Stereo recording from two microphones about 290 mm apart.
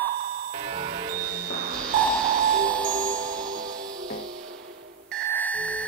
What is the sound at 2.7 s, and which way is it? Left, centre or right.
Music, centre.